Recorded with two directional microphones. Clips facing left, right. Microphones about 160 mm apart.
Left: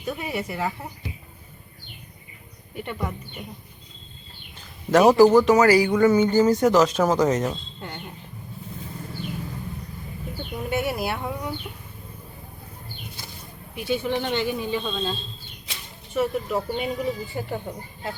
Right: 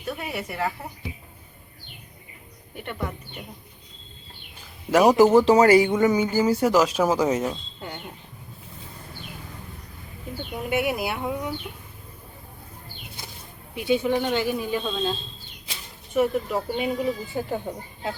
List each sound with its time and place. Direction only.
0.0 s speech: centre (ahead or behind)
2.7 s speech: centre (ahead or behind)
4.9 s speech: 10° right (ahead or behind)
5.1 s speech: 25° right (ahead or behind); by 7.5 s 10° right (ahead or behind)
10.7 s speech: 10° right (ahead or behind)
13.7 s speech: 20° right (ahead or behind)
14.2 s speech: 5° right (ahead or behind)
16.1 s speech: 5° right (ahead or behind)